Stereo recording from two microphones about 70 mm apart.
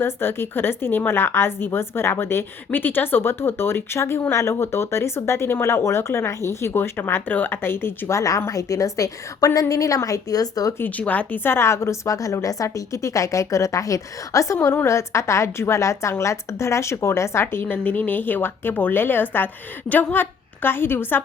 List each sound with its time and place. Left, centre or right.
0.0 s speech: left
10.8 s a woman's voice: left
11.5 s a woman's voice: left
17.4 s a woman's voice: left